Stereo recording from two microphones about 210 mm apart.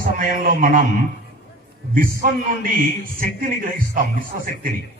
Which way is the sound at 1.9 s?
40° right (ahead or behind).